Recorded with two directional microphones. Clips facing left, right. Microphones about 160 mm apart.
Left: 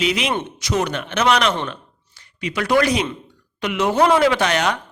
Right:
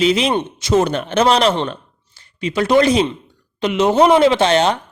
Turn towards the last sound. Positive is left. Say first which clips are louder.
# right 5 dB
turn(degrees=-25)  # may be behind; listen again after turning